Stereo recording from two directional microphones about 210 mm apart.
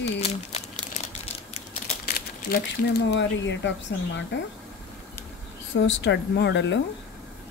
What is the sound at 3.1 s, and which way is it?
Speech, 60° left (ahead or behind).